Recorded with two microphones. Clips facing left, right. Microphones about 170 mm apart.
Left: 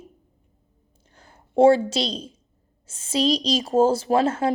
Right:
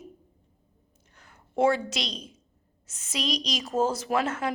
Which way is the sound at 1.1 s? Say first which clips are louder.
Left 5 dB; 30° left (ahead or behind).